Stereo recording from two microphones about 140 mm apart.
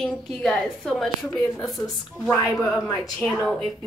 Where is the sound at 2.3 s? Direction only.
25° left (ahead or behind).